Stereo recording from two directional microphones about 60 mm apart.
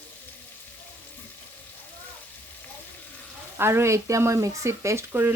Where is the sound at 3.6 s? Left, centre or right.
Right.